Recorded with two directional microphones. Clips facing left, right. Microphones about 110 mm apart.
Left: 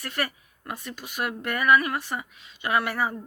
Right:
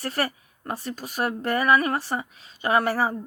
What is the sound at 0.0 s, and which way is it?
Speech, 35° right (ahead or behind).